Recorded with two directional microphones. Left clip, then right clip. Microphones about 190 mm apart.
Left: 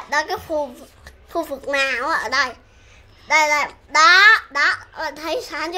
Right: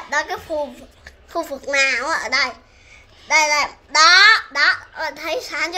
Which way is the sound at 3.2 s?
35° left (ahead or behind).